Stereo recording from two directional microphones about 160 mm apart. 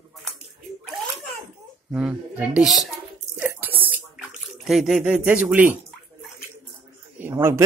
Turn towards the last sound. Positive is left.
turn(degrees=-15)  # may be behind; listen again after turning